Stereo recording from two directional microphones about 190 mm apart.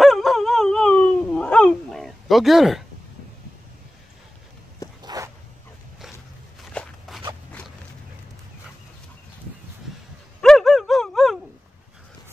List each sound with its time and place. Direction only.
0.0 s wail: centre (ahead or behind)
5.0 s dog: 20° right (ahead or behind)
6.7 s walk: 5° left (ahead or behind)
10.4 s a sound: centre (ahead or behind)